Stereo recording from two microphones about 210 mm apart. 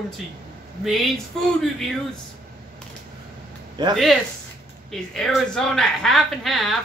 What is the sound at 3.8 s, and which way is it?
Speech, 20° right (ahead or behind).